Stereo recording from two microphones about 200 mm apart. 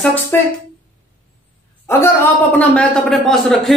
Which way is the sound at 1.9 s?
10° left (ahead or behind).